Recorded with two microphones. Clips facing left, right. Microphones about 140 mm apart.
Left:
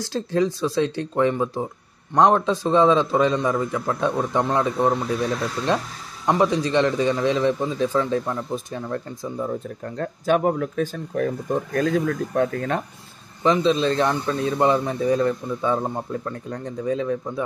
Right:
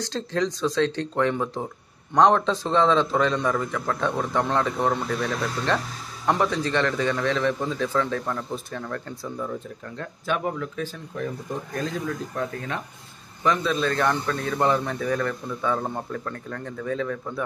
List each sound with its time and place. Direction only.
0.0 s a man's voice: 10° left (ahead or behind)
6.2 s a man's voice: 10° left (ahead or behind)
9.4 s speech: 40° left (ahead or behind)
13.4 s speech: 25° left (ahead or behind)